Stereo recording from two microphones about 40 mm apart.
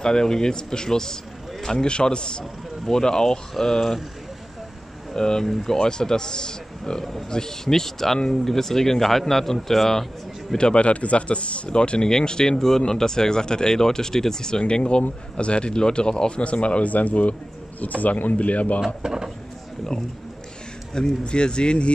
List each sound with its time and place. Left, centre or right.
0.0 s speech: centre
5.1 s speech: centre
10.5 s speech: left
14.6 s speech: left
19.0 s drawer open or close: centre
20.9 s speech: left